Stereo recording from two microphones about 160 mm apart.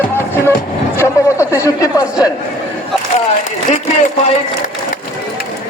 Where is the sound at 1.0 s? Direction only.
20° left (ahead or behind).